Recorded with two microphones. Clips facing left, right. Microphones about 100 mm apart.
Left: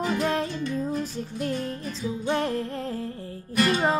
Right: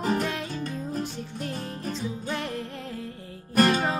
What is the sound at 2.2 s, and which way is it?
Music, 35° left (ahead or behind).